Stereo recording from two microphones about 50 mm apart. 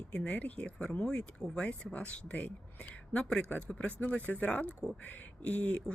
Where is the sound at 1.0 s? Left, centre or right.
Centre.